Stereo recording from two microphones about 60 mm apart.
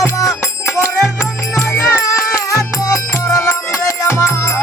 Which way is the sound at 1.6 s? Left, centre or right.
Left.